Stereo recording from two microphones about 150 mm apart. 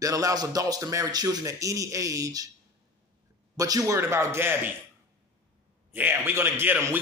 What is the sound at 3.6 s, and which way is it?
A man's voice, 20° right (ahead or behind).